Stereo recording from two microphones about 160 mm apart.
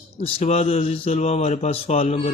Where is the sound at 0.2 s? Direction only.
40° left (ahead or behind).